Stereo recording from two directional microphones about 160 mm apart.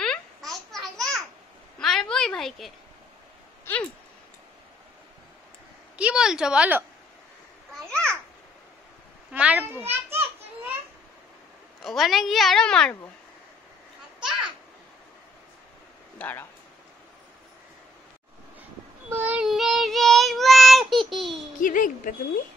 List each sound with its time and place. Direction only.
0.0 s a sound: 5° left (ahead or behind)
5.9 s a woman's voice: 5° right (ahead or behind)
7.7 s babbling: 5° left (ahead or behind)
9.3 s a child's voice: 10° right (ahead or behind)
11.8 s a woman's voice: centre (ahead or behind)
16.2 s speech: 10° left (ahead or behind)
19.0 s child singing: 10° right (ahead or behind)
21.5 s a woman's voice: 55° left (ahead or behind)